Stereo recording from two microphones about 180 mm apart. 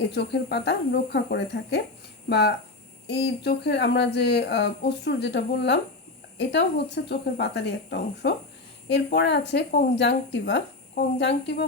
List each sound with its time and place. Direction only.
0.1 s speech: 65° left (ahead or behind)